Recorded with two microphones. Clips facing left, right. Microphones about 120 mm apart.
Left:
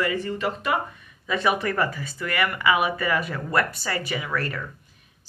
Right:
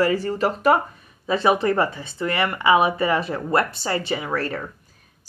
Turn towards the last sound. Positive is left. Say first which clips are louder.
# right 3 dB
turn(degrees=-30)  # may be behind; listen again after turning